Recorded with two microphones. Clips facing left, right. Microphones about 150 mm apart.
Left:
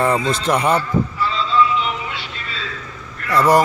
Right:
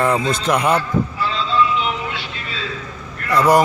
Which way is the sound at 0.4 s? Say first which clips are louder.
Even; centre (ahead or behind).